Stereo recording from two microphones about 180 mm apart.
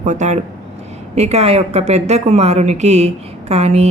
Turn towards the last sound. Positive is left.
turn(degrees=-35)  # may be behind; listen again after turning